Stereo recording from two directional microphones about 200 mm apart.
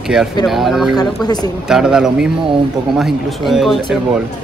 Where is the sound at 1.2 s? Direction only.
20° left (ahead or behind).